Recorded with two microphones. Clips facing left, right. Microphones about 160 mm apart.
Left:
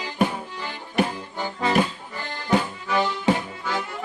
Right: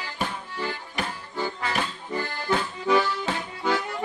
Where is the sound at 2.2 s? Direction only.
20° left (ahead or behind).